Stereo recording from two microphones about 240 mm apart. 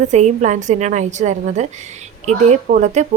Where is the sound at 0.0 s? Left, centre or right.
Right.